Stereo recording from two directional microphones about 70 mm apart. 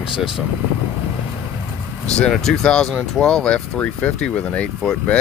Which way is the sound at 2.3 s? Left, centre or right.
Centre.